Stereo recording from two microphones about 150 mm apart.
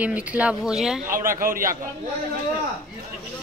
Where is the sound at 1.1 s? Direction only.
65° right (ahead or behind).